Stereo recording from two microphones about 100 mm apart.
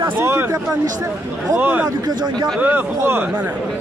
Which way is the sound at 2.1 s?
45° right (ahead or behind).